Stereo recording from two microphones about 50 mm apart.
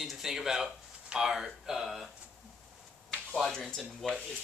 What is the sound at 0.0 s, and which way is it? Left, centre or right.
Speech, centre.